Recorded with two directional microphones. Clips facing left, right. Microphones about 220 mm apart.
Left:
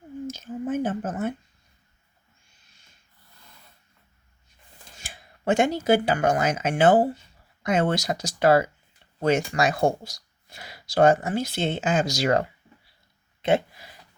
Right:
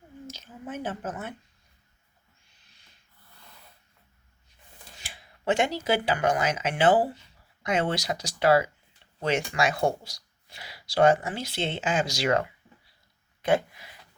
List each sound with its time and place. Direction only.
0.3 s a sound: 50° left (ahead or behind)
2.5 s owl: 45° left (ahead or behind)
4.9 s speech: 45° left (ahead or behind); by 13.9 s 30° left (ahead or behind)